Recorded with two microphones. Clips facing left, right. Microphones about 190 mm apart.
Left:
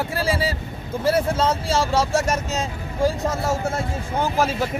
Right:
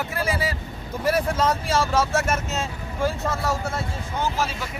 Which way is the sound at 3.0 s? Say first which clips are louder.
Left 3 dB; 20° left (ahead or behind).